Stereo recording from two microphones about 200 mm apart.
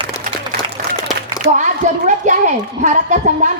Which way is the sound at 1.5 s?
35° right (ahead or behind).